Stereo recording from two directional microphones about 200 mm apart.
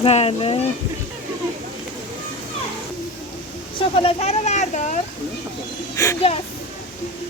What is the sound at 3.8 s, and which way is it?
Speech, 25° left (ahead or behind).